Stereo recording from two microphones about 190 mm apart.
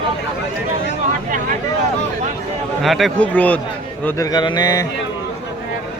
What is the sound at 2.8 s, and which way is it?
Speech, centre (ahead or behind).